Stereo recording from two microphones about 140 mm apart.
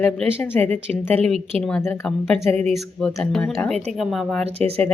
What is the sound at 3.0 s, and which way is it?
Speech, 5° left (ahead or behind).